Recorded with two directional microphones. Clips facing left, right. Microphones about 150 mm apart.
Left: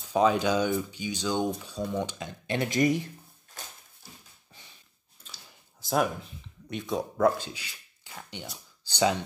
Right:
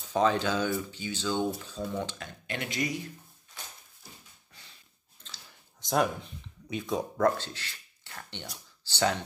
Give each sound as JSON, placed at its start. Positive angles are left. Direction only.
{"t": 0.0, "sound": "speech", "side_deg": 10}
{"t": 2.5, "sound": "speech", "side_deg": 35}
{"t": 5.2, "sound": "speech", "side_deg": 10}